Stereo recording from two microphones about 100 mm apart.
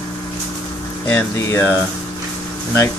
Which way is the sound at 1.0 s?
20° left (ahead or behind).